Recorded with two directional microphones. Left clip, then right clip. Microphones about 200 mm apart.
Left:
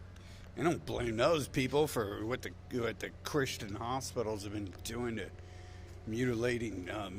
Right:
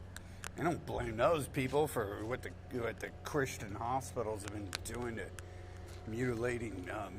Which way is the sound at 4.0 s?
60° left (ahead or behind).